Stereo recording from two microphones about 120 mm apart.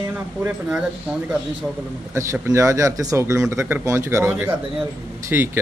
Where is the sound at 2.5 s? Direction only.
25° right (ahead or behind).